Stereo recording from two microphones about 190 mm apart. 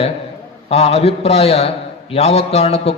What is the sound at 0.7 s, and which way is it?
A man's voice, 35° left (ahead or behind).